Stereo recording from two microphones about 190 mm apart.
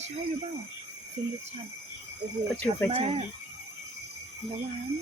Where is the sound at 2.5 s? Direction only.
5° left (ahead or behind).